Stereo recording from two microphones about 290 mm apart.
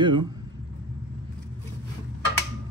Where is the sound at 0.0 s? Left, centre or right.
Centre.